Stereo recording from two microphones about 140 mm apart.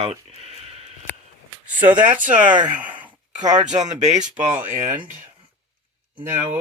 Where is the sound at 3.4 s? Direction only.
60° right (ahead or behind).